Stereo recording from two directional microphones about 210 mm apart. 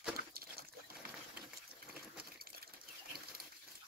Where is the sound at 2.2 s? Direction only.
45° right (ahead or behind).